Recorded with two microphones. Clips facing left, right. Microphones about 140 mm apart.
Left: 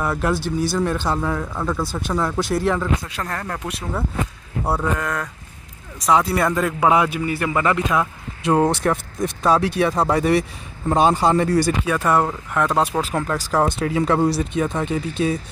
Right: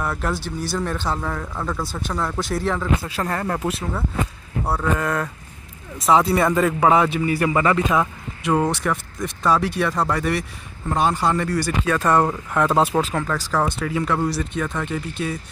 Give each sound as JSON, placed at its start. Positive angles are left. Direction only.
{"t": 0.0, "sound": "speech", "side_deg": 5}
{"t": 4.9, "sound": "speech", "side_deg": -5}
{"t": 8.5, "sound": "speech", "side_deg": 25}
{"t": 12.3, "sound": "speech", "side_deg": 0}
{"t": 13.1, "sound": "speech", "side_deg": 15}